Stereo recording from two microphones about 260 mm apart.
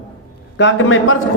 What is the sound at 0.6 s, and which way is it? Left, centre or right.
Speech, left.